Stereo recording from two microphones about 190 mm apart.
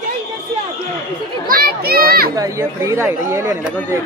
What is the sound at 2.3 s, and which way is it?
Speech, 15° right (ahead or behind).